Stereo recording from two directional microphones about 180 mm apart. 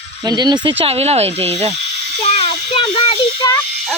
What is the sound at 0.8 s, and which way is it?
Speech, 35° right (ahead or behind).